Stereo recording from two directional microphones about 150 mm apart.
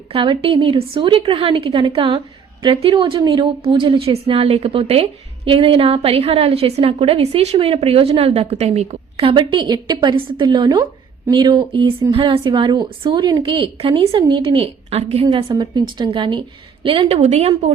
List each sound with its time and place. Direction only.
0.1 s a woman's voice: 35° right (ahead or behind)
15.4 s a woman's voice: 30° right (ahead or behind); by 17.7 s 45° right (ahead or behind)